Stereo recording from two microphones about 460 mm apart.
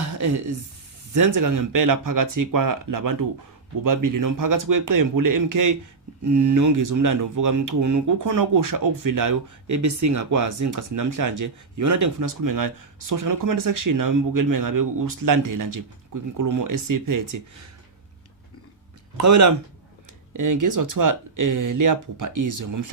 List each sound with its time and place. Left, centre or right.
0.0 s a sound: right
1.1 s a man's voice: right
19.1 s speech: right